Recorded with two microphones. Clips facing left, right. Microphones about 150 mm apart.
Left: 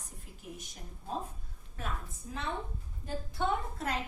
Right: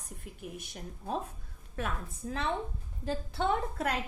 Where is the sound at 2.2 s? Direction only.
85° right.